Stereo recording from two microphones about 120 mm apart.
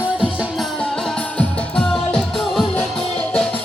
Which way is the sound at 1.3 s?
5° left (ahead or behind).